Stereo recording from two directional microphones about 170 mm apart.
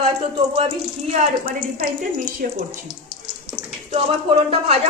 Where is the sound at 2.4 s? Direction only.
55° right (ahead or behind).